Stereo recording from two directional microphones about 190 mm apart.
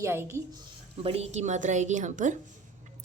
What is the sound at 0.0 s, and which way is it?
Speech, 15° right (ahead or behind).